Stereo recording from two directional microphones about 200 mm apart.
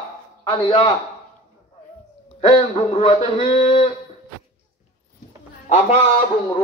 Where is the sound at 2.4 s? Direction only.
25° left (ahead or behind).